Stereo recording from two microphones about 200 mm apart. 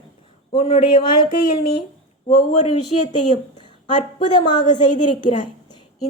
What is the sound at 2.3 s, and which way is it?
Speech, 35° left (ahead or behind).